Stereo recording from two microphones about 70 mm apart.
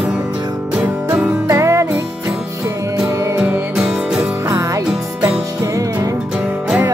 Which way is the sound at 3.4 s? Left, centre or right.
Centre.